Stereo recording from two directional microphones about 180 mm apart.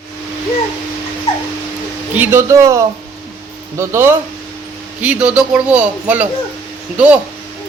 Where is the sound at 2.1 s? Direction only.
10° right (ahead or behind).